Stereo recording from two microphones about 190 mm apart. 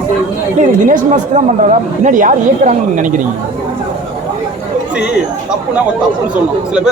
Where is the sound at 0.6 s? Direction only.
40° right (ahead or behind).